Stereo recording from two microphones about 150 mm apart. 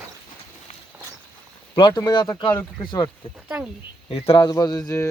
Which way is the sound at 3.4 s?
10° right (ahead or behind).